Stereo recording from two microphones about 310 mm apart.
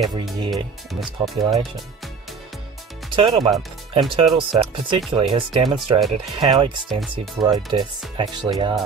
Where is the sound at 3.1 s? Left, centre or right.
Centre.